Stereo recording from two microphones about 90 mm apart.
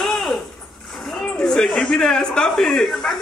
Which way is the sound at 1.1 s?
10° left (ahead or behind).